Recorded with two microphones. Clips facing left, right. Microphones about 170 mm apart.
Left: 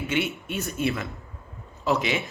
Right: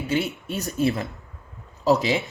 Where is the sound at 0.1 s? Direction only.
35° right (ahead or behind).